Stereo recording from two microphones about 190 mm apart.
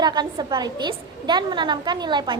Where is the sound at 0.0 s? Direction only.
20° right (ahead or behind).